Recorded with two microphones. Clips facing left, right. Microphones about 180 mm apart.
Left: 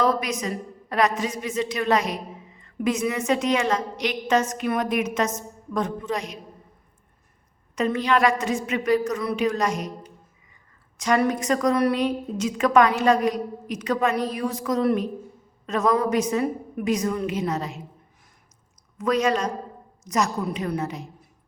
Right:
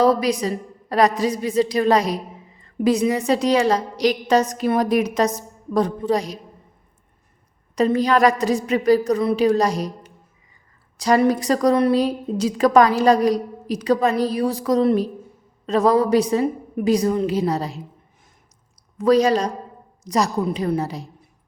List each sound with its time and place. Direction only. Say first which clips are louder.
0.0 s a woman's voice: right 6 dB; 35° right (ahead or behind)
7.8 s a woman's voice: right 5 dB; 35° right (ahead or behind)
10.9 s a woman's voice: right 5 dB; 35° right (ahead or behind)
18.9 s a woman's voice: right 6 dB; 35° right (ahead or behind)